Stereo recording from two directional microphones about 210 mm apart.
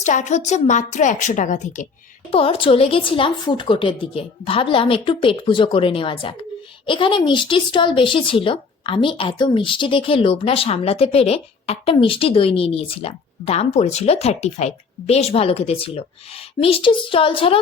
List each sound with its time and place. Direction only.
0.0 s a woman's voice: 35° left (ahead or behind)
2.3 s speech: 25° left (ahead or behind)